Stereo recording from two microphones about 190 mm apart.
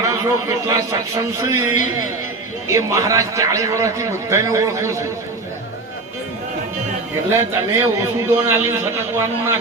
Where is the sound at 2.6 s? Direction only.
15° right (ahead or behind).